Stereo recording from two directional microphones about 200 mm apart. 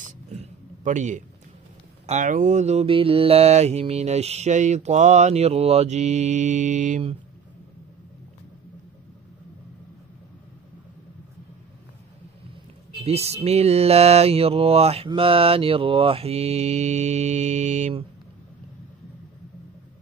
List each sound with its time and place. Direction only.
0.0 s a sound: 35° right (ahead or behind)
2.0 s mantra: 40° right (ahead or behind)
13.0 s mantra: 30° right (ahead or behind)